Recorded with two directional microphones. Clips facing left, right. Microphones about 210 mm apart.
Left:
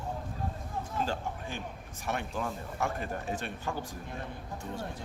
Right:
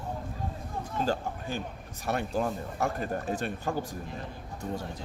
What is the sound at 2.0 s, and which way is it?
Speech, 35° right (ahead or behind).